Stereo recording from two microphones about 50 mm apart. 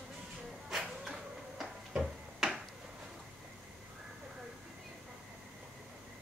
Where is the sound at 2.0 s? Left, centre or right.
Centre.